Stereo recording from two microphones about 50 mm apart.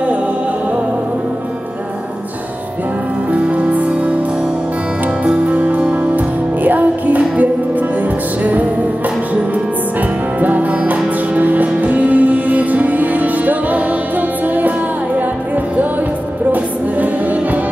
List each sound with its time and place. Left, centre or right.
3.3 s music: right
5.2 s music: right
10.4 s music: right
16.5 s music: right